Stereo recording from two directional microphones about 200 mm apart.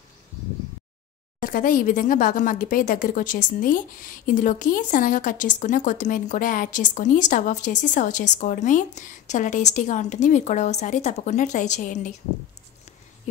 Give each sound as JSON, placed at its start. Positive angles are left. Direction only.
{"t": 1.4, "sound": "speech", "side_deg": 45}